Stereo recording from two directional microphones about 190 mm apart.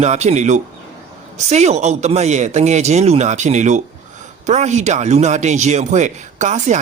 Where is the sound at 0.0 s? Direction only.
35° right (ahead or behind).